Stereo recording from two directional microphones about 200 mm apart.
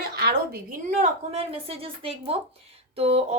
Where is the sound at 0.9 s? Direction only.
35° right (ahead or behind).